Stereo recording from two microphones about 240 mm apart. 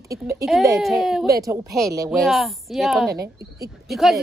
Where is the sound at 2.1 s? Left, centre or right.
Centre.